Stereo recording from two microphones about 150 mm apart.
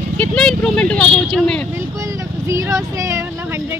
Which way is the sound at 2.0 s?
20° right (ahead or behind).